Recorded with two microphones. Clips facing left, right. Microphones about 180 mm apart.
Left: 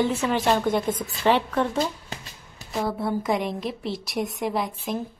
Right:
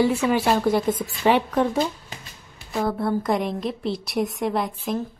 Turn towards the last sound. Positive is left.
turn(degrees=0)  # may be behind; listen again after turning